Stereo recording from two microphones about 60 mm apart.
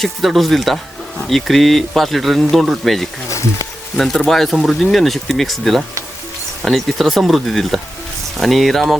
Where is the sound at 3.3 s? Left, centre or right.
Left.